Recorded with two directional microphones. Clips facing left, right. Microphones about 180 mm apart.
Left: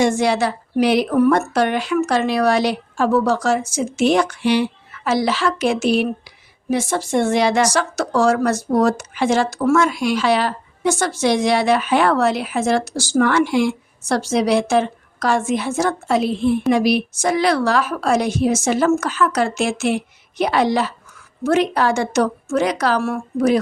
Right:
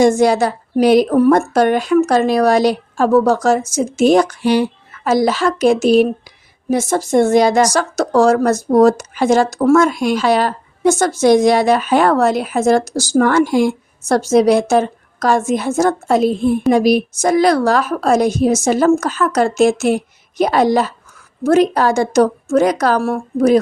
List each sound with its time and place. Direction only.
0.0 s a woman's voice: 40° right (ahead or behind)